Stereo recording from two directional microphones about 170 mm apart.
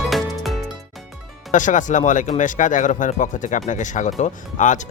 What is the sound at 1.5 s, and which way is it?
Speech, 45° left (ahead or behind).